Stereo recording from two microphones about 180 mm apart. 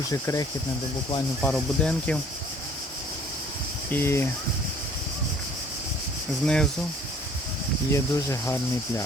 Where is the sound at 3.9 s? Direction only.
15° left (ahead or behind).